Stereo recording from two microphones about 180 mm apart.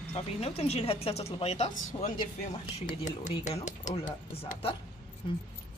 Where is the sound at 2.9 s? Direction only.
40° left (ahead or behind).